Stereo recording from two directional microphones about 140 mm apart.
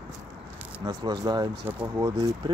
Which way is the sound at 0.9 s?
25° right (ahead or behind).